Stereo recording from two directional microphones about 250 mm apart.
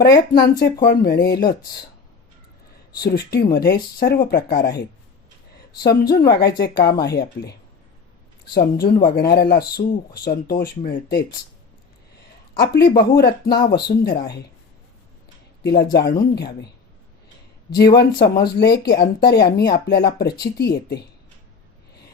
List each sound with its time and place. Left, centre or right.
0.0 s speech: left
3.0 s speech: left
5.8 s speech: left
8.5 s speech: centre
9.0 s speech: left
12.5 s speech: left
15.6 s speech: left
17.9 s speech: left